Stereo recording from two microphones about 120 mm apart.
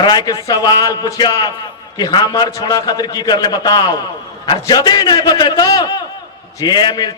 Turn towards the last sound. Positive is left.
turn(degrees=35)  # may be behind; listen again after turning